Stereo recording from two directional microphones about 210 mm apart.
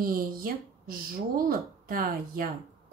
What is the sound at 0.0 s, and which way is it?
A woman's voice, 45° right (ahead or behind).